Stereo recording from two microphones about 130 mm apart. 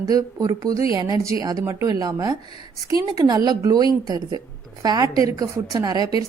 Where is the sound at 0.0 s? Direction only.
25° right (ahead or behind).